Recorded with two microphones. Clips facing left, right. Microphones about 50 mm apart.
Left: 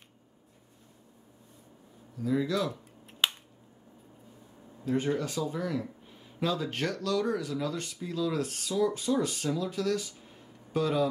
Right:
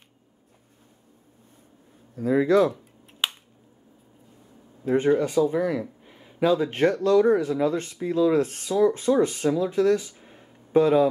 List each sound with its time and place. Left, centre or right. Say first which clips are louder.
2.1 s speech: right 10 dB; right
2.7 s a sound: right 3 dB; centre
4.8 s speech: right 8 dB; right
5.3 s speech: right 10 dB; centre